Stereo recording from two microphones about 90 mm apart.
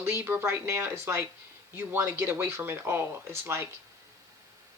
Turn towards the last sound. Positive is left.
turn(degrees=-30)  # may be behind; listen again after turning